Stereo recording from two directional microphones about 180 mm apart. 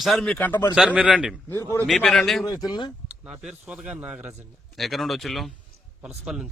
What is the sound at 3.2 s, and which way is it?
Speech, 5° right (ahead or behind).